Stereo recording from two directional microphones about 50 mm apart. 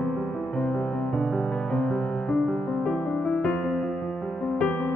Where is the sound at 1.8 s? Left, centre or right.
Centre.